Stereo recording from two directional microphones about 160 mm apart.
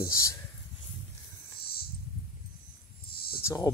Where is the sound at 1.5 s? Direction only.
75° left (ahead or behind).